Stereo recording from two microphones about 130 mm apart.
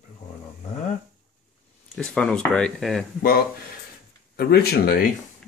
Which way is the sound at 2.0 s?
5° left (ahead or behind).